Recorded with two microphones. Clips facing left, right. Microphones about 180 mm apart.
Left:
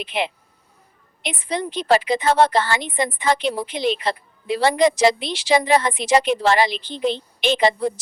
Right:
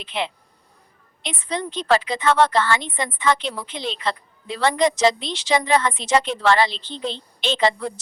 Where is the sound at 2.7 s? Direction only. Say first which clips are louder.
Left 3 dB; 10° left (ahead or behind).